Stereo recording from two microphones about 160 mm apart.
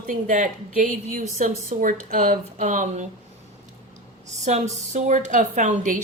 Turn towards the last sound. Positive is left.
turn(degrees=-50)  # may be behind; listen again after turning